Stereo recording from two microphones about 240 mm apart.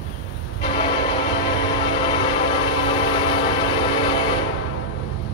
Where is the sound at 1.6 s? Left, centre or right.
Centre.